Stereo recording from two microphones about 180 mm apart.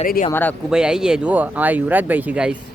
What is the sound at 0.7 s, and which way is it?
A man's voice, 5° right (ahead or behind).